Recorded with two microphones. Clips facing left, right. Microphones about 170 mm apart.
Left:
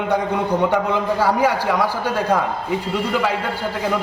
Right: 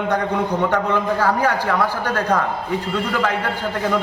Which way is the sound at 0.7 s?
10° left (ahead or behind).